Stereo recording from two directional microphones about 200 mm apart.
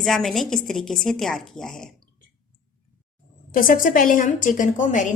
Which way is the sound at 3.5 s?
45° left (ahead or behind).